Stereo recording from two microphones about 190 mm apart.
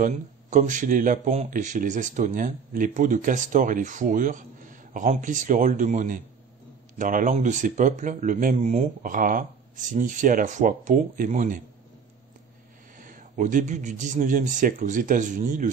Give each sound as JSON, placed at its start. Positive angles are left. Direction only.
{"t": 0.0, "sound": "speech", "side_deg": -40}
{"t": 12.9, "sound": "speech", "side_deg": -45}